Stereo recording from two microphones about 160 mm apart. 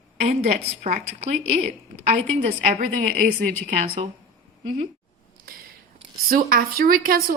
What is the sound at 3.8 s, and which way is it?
Speech, 35° right (ahead or behind).